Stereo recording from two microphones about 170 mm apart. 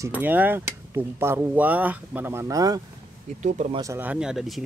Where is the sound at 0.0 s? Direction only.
10° right (ahead or behind).